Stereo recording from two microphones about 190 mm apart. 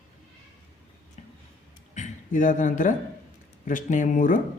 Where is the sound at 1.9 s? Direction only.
40° left (ahead or behind).